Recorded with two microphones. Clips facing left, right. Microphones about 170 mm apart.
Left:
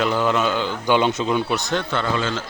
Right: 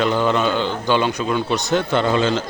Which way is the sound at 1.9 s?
20° right (ahead or behind).